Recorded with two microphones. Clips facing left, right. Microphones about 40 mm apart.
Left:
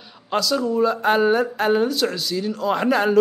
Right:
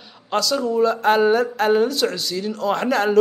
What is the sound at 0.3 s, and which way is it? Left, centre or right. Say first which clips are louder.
Speech: even; centre.